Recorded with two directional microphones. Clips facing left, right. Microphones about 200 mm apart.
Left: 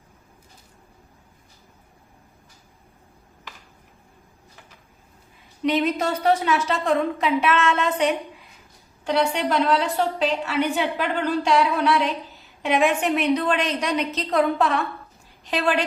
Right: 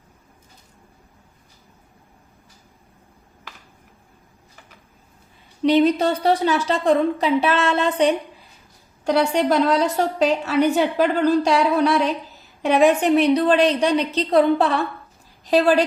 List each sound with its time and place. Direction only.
5.6 s a woman's voice: 35° right (ahead or behind)